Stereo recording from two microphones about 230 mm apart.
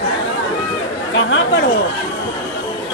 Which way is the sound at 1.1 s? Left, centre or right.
Left.